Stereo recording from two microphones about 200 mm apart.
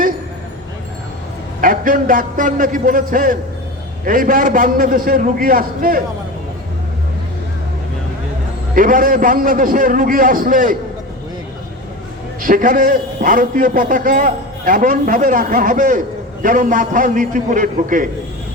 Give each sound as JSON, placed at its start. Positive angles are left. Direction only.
{"t": 1.6, "sound": "a man's voice", "side_deg": -45}
{"t": 8.7, "sound": "a man's voice", "side_deg": -45}
{"t": 12.4, "sound": "a man's voice", "side_deg": -45}